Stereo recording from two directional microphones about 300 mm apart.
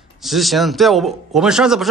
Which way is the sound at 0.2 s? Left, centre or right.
Centre.